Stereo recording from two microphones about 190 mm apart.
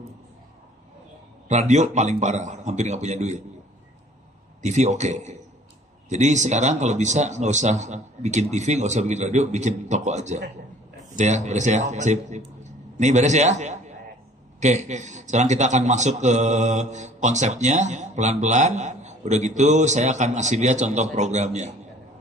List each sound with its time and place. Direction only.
1.5 s a man's voice: 40° right (ahead or behind)
4.6 s a man's voice: 40° right (ahead or behind)